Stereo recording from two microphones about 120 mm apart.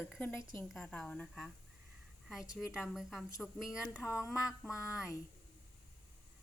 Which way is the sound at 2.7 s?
Centre (ahead or behind).